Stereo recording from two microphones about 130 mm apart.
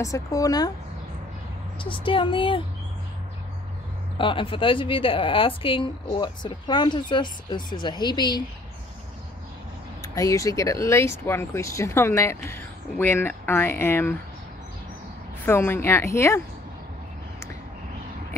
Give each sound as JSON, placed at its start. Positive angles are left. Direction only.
{"t": 0.0, "sound": "speech", "side_deg": 25}
{"t": 1.8, "sound": "a woman's voice", "side_deg": 40}
{"t": 4.2, "sound": "a woman's voice", "side_deg": 40}
{"t": 10.0, "sound": "speech", "side_deg": 25}
{"t": 15.4, "sound": "speech", "side_deg": 20}